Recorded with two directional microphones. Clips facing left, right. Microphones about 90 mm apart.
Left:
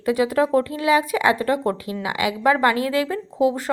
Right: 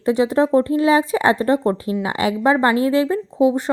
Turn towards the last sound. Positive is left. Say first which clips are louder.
# right 3 dB
turn(degrees=-25)  # may be behind; listen again after turning